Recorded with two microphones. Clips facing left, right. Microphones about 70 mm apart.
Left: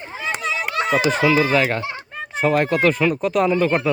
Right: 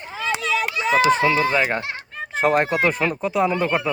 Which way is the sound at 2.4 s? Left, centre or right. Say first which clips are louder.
Even; right.